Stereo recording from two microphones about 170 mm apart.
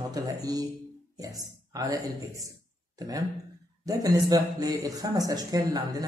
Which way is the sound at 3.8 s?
20° right (ahead or behind).